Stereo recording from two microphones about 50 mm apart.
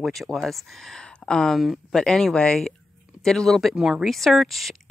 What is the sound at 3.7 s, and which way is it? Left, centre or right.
Speech, centre.